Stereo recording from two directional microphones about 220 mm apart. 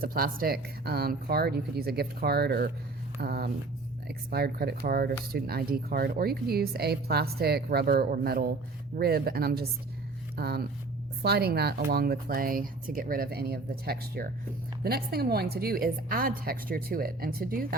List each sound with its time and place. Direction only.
0.0 s speech: 40° right (ahead or behind)